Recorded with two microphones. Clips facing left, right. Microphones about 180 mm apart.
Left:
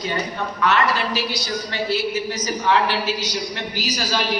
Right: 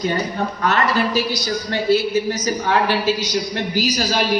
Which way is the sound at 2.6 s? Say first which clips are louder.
Left 1 dB; 45° right (ahead or behind).